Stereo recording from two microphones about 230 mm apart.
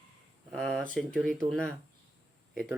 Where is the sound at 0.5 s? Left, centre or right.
Centre.